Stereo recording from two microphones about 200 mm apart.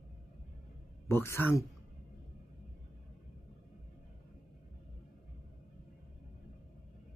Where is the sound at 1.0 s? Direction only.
10° left (ahead or behind).